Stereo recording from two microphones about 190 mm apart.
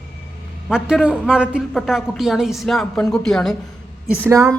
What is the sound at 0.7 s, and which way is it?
A woman's voice, 5° right (ahead or behind).